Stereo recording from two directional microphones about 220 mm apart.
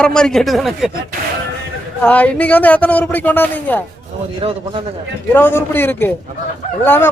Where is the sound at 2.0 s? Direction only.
5° left (ahead or behind).